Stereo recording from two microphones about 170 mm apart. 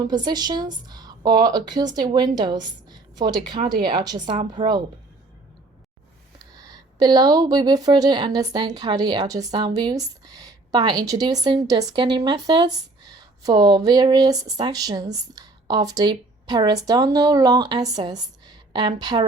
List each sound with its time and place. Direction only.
0.1 s speech: 25° right (ahead or behind)
6.6 s speech: 20° right (ahead or behind)